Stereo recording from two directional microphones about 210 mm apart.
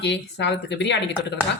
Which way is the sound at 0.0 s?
55° left (ahead or behind).